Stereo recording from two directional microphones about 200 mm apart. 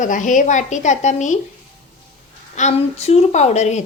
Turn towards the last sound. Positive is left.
turn(degrees=35)  # may be behind; listen again after turning